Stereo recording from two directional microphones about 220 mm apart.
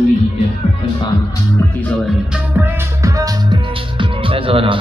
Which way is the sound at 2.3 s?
10° right (ahead or behind).